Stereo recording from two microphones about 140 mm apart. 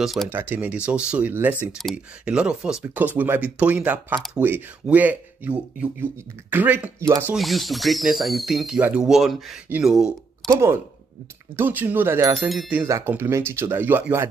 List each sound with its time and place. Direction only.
0.0 s speech: centre (ahead or behind)
0.3 s speech: 15° right (ahead or behind)
7.3 s speech: centre (ahead or behind)
10.5 s speech: 20° right (ahead or behind)
12.4 s speech: centre (ahead or behind)
12.8 s speech: 20° right (ahead or behind)